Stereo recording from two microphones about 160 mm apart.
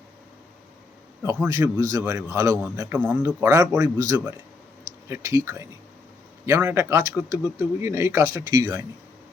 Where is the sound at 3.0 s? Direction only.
10° right (ahead or behind); by 8.9 s 25° right (ahead or behind).